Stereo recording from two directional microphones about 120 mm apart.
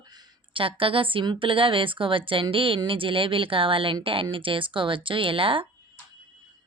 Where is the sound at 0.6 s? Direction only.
45° right (ahead or behind).